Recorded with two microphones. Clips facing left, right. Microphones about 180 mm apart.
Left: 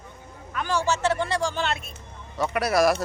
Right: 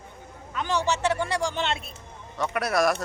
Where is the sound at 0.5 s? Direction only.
20° right (ahead or behind).